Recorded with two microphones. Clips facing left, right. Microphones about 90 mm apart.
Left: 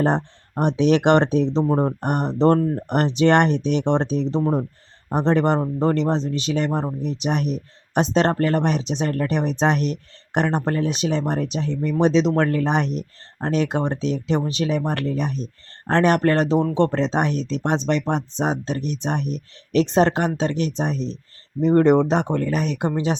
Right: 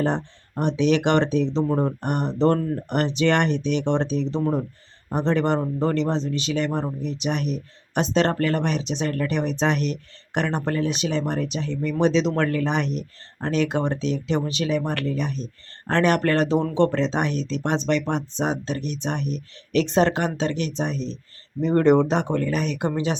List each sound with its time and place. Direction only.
0.0 s speech: 45° left (ahead or behind)
1.6 s speech: 30° left (ahead or behind)
2.0 s speech: 45° left (ahead or behind)
4.4 s speech: 20° left (ahead or behind)
5.1 s speech: 40° left (ahead or behind); by 17.0 s 25° left (ahead or behind)
17.0 s speech: 35° left (ahead or behind)
21.6 s speech: 20° left (ahead or behind)
22.5 s speech: 35° left (ahead or behind)